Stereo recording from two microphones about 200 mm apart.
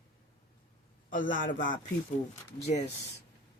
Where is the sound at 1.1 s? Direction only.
40° left (ahead or behind).